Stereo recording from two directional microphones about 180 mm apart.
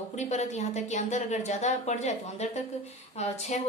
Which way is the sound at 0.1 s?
40° left (ahead or behind).